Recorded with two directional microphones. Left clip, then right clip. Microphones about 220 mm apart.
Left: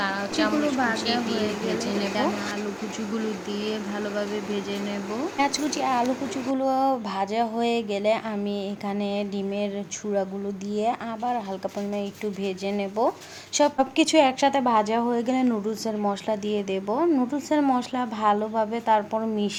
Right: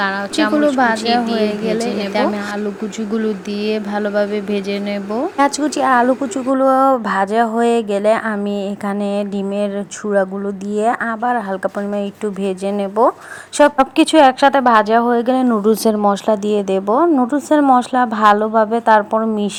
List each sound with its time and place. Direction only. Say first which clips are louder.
0.0 s speech: right 8 dB; 30° right (ahead or behind)
3.6 s speech: right 12 dB; 35° right (ahead or behind)
10.8 s speech: right 10 dB; 25° right (ahead or behind)
15.6 s speech: right 13 dB; 35° right (ahead or behind)